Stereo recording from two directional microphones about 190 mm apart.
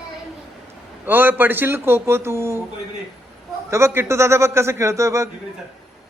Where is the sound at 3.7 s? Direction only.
15° right (ahead or behind).